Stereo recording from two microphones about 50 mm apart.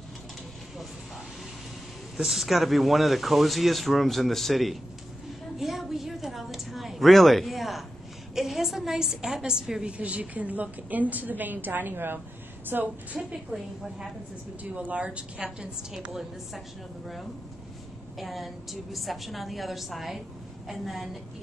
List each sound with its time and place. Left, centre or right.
2.1 s a man's voice: centre
5.6 s a sound: centre
8.4 s a woman's voice: centre; by 12.9 s right
13.3 s a woman's voice: centre
14.6 s a woman's voice: right
16.1 s a man's voice: centre